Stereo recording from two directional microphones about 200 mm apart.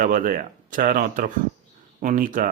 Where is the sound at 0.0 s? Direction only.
40° right (ahead or behind).